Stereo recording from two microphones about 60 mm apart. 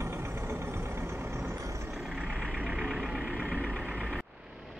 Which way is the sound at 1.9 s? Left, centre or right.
Centre.